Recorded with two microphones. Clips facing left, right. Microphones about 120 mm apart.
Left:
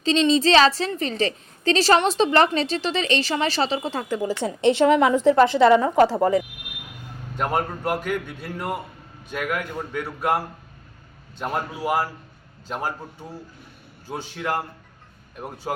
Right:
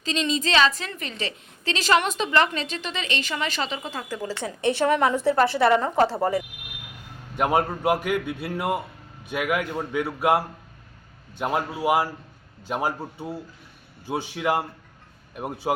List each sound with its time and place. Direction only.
0.0 s a woman's voice: 30° left (ahead or behind)
4.3 s speech: 20° left (ahead or behind)
7.3 s a man's voice: 10° right (ahead or behind)